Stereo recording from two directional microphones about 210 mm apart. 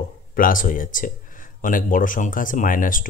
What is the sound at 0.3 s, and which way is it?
Speech, 40° left (ahead or behind).